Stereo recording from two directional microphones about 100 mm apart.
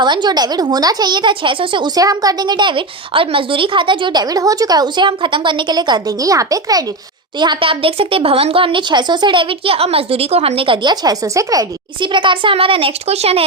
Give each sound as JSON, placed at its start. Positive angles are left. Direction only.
{"t": 0.0, "sound": "a woman's voice", "side_deg": -50}
{"t": 2.0, "sound": "a woman's voice", "side_deg": -40}
{"t": 7.3, "sound": "speech", "side_deg": -50}
{"t": 10.8, "sound": "speech", "side_deg": -40}
{"t": 11.9, "sound": "speech", "side_deg": -55}